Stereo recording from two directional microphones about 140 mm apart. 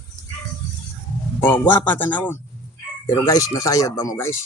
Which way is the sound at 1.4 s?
15° left (ahead or behind).